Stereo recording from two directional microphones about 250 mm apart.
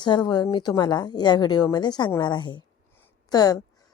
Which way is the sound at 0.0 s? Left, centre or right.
Centre.